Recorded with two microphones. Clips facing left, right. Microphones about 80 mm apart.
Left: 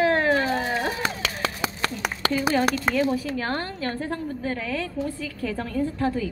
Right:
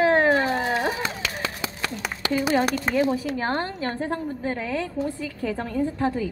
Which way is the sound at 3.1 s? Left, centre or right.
Right.